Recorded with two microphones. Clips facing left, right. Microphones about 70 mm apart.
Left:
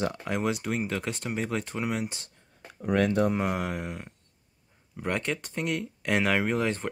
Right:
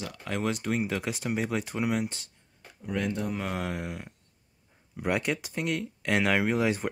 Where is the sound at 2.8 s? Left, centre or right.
Left.